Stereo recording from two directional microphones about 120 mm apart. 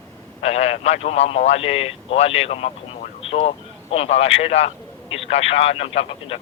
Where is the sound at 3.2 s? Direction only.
55° left (ahead or behind).